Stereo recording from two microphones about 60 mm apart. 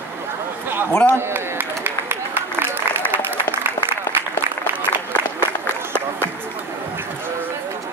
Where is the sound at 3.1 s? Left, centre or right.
Right.